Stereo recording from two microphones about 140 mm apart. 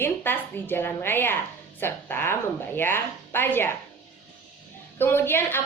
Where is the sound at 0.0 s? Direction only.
15° left (ahead or behind).